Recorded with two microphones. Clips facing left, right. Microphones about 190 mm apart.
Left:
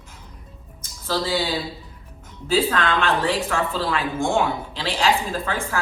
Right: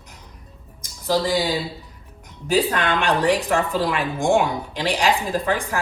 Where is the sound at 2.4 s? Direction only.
15° right (ahead or behind).